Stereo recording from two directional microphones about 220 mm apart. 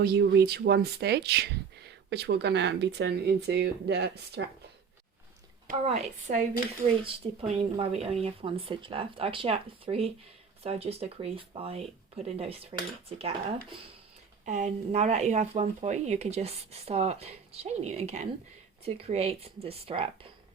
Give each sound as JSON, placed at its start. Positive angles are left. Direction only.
{"t": 0.0, "sound": "speech", "side_deg": -45}
{"t": 5.6, "sound": "speech", "side_deg": -30}